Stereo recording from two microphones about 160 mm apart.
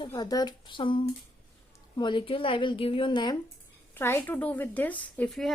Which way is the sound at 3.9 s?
15° left (ahead or behind).